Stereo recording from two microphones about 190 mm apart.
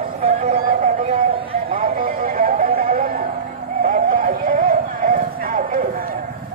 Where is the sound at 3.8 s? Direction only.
45° right (ahead or behind).